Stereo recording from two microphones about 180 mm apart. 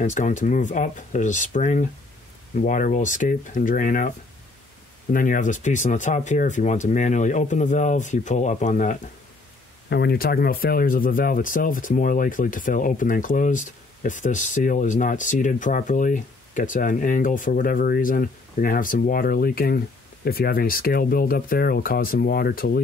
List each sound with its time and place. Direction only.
0.0 s speech: 45° left (ahead or behind)
5.1 s speech: 50° left (ahead or behind)
9.8 s speech: 65° left (ahead or behind)